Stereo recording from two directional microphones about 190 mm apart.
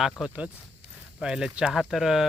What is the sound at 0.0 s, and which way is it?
Speech, 5° right (ahead or behind).